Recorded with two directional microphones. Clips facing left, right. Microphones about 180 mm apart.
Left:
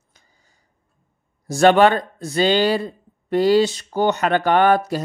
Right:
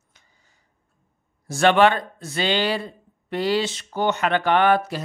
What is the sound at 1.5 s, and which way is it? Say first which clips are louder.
Speech: left 3 dB; 40° left (ahead or behind).